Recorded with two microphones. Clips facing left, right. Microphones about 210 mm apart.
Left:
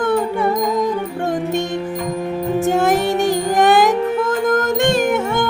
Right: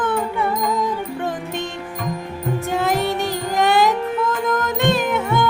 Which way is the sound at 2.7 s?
50° left (ahead or behind).